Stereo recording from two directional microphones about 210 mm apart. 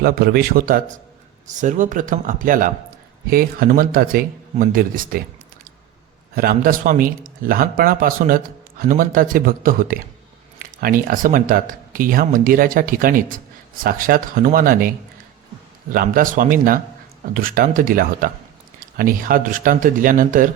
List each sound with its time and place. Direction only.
0.0 s a man's voice: 50° right (ahead or behind)
6.3 s a man's voice: 45° right (ahead or behind)